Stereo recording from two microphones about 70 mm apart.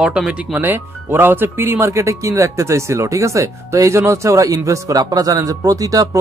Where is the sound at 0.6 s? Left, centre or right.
Right.